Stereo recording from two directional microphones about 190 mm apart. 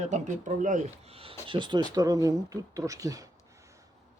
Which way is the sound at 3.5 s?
15° right (ahead or behind).